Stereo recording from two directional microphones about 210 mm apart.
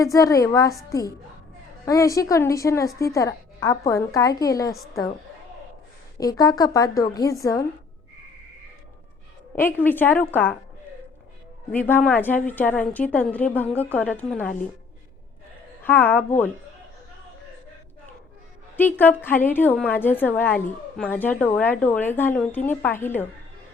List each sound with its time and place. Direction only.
0.0 s a woman's voice: 15° left (ahead or behind)
6.1 s a woman's voice: 15° left (ahead or behind)
9.6 s a woman's voice: 10° left (ahead or behind)
11.7 s a woman's voice: 10° left (ahead or behind)
15.8 s a woman's voice: 10° left (ahead or behind)
18.8 s a woman's voice: 10° left (ahead or behind)